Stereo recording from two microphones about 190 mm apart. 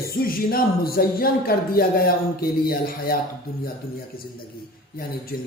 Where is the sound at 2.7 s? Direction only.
50° left (ahead or behind).